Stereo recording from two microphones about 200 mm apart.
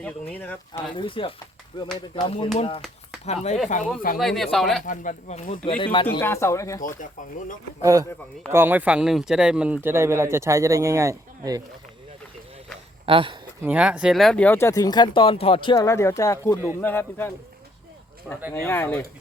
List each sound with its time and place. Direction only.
0.0 s speech: 10° left (ahead or behind)
0.7 s speech: 25° left (ahead or behind)
4.2 s speech: centre (ahead or behind)
4.9 s speech: 35° left (ahead or behind)
6.1 s speech: 15° left (ahead or behind)
6.8 s speech: 40° left (ahead or behind)
7.8 s speech: 15° right (ahead or behind)
13.1 s speech: 25° right (ahead or behind)
13.6 s speech: 5° right (ahead or behind); by 17.3 s 10° left (ahead or behind)
18.3 s speech: 5° right (ahead or behind)
18.6 s speech: 10° left (ahead or behind)